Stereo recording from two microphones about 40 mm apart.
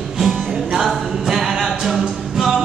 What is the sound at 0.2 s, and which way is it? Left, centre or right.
Music, centre.